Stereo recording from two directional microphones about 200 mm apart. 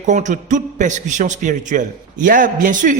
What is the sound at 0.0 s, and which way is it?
A man's voice, 40° right (ahead or behind).